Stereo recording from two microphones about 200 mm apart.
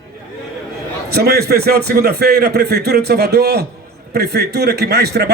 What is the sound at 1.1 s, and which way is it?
A man's voice, 55° right (ahead or behind).